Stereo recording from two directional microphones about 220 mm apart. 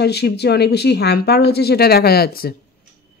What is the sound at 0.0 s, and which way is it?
A woman's voice, 50° left (ahead or behind).